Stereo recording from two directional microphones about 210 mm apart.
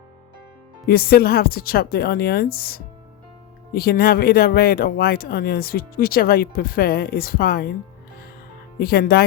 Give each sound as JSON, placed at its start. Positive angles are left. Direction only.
{"t": 0.9, "sound": "speech", "side_deg": 45}
{"t": 8.8, "sound": "speech", "side_deg": 45}